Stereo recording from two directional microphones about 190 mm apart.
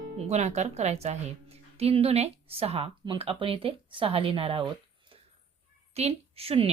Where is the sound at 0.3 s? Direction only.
35° right (ahead or behind).